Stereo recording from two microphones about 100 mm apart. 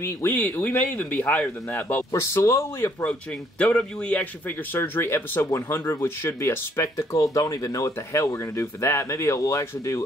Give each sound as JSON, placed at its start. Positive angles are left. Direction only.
{"t": 0.0, "sound": "a man's voice", "side_deg": 20}
{"t": 3.0, "sound": "a man's voice", "side_deg": 10}